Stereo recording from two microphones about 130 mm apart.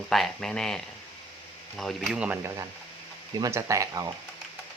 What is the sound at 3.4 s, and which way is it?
Speech, 25° right (ahead or behind).